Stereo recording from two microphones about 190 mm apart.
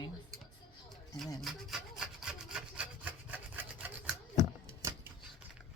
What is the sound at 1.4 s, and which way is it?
Rub, centre (ahead or behind).